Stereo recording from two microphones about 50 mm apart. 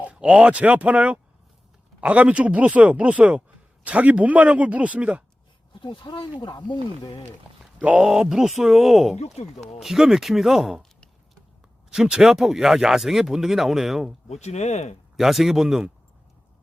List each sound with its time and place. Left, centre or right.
0.0 s speech: right
7.8 s speech: right
8.0 s speech: centre
11.9 s speech: centre
15.1 s speech: centre